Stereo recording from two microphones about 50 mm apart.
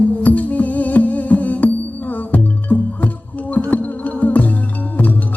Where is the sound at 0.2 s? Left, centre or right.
Left.